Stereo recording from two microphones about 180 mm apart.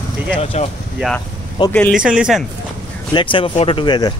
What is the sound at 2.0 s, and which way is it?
Speech, 5° right (ahead or behind).